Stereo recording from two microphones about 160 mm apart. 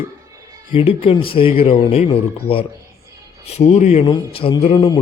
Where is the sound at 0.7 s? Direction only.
35° left (ahead or behind).